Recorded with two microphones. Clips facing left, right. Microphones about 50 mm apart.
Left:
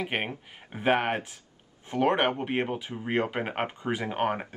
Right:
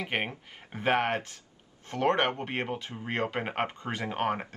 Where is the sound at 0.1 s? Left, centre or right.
Centre.